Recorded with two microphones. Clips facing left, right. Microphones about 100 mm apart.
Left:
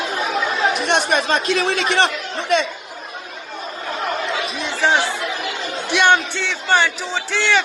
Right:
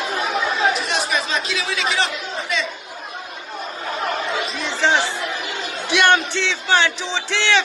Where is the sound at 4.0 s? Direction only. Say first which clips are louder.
Even; centre (ahead or behind).